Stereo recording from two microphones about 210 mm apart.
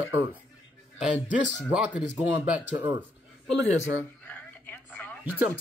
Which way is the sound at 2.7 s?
20° right (ahead or behind).